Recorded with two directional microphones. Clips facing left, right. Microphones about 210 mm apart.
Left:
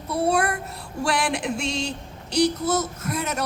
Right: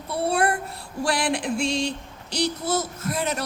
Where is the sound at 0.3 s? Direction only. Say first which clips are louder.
Right 1 dB; 30° right (ahead or behind).